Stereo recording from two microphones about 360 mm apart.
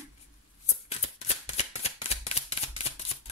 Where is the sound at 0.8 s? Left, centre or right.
Centre.